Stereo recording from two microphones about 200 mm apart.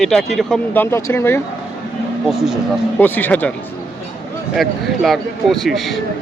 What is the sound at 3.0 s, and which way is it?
Speech, 10° left (ahead or behind).